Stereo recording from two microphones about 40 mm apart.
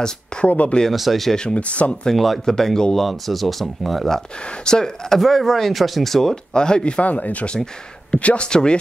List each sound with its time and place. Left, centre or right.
0.5 s speech: left
0.9 s speech: centre
1.3 s speech: left
1.6 s speech: left
2.1 s speech: centre
3.1 s speech: centre
4.5 s speech: centre
5.2 s speech: centre
6.3 s speech: left
7.1 s speech: left